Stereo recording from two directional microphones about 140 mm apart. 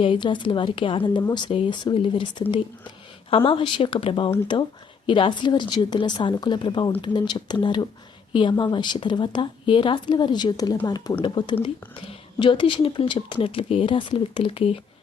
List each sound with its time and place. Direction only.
0.0 s a woman's voice: 35° left (ahead or behind)